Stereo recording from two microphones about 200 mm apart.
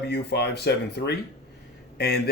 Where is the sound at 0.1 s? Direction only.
55° left (ahead or behind).